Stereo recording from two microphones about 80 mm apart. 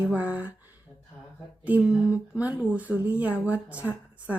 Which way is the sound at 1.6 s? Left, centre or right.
Centre.